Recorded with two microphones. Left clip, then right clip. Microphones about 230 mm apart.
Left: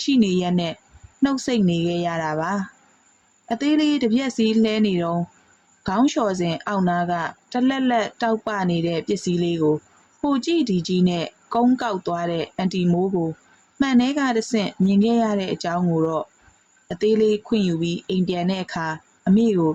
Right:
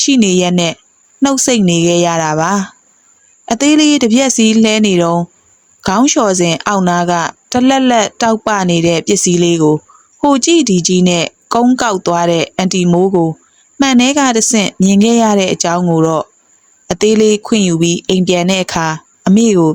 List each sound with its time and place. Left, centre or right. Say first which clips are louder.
0.0 s a woman's voice: right 10 dB; right